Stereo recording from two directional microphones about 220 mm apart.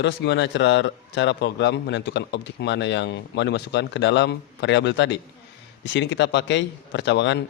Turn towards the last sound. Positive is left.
turn(degrees=55)  # may be behind; listen again after turning